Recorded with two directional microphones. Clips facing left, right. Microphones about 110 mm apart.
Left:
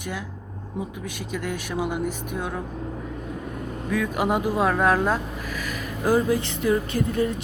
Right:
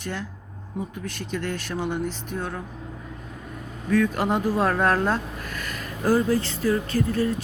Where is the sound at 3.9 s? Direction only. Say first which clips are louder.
Right 2 dB; 10° left (ahead or behind).